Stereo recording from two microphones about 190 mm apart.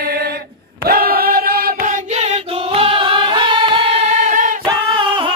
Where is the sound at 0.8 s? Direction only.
50° right (ahead or behind).